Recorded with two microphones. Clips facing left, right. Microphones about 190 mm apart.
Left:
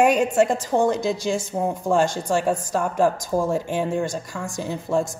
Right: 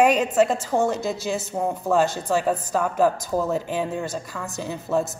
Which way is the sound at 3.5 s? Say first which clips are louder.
Left 2 dB; 50° left (ahead or behind).